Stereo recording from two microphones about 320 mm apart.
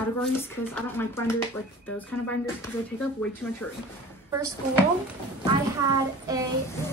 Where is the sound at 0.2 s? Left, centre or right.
Centre.